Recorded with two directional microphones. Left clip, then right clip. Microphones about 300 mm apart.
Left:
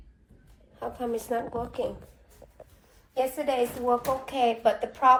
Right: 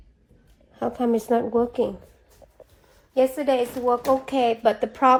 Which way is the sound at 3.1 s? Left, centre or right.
Right.